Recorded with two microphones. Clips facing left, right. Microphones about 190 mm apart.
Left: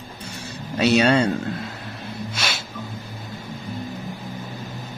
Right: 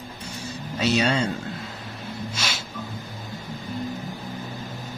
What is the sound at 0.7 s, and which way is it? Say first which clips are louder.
Speech: left 5 dB; 65° left (ahead or behind).